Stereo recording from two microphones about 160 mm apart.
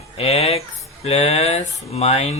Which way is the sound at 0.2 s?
40° left (ahead or behind).